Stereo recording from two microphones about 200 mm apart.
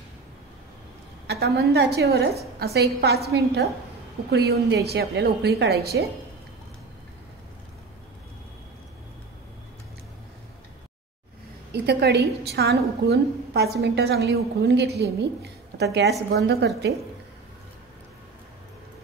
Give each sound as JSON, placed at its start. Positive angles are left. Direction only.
{"t": 1.2, "sound": "a woman's voice", "side_deg": -55}
{"t": 11.7, "sound": "a woman's voice", "side_deg": -55}